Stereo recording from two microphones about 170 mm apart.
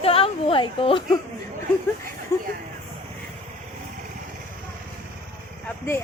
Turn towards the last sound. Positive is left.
turn(degrees=15)  # may be behind; listen again after turning